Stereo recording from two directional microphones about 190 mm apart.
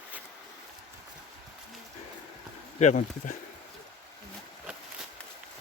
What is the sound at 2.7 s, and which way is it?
Speech, 40° left (ahead or behind).